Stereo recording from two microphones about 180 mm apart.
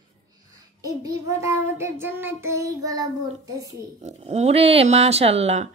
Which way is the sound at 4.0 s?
40° right (ahead or behind).